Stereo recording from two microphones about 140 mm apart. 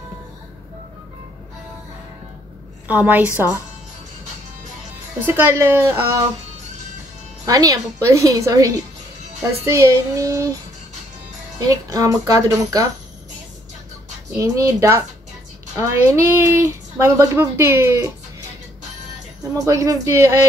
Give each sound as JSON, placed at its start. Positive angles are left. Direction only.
{"t": 2.9, "sound": "speech", "side_deg": -10}
{"t": 5.2, "sound": "speech", "side_deg": -15}
{"t": 7.4, "sound": "a woman's voice", "side_deg": -25}
{"t": 11.6, "sound": "a woman's voice", "side_deg": -25}
{"t": 14.3, "sound": "a woman's voice", "side_deg": -25}
{"t": 19.5, "sound": "a woman's voice", "side_deg": -25}